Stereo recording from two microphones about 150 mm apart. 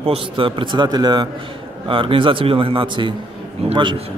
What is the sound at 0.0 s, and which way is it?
A man's voice, 35° right (ahead or behind).